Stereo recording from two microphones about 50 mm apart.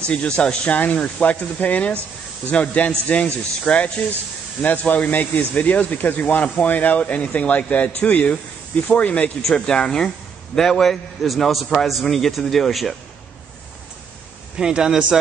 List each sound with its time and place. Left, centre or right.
0.0 s a man's voice: left
9.4 s a man's voice: centre
14.6 s a man's voice: centre